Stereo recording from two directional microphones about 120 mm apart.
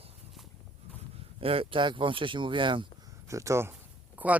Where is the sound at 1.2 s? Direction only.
50° right (ahead or behind).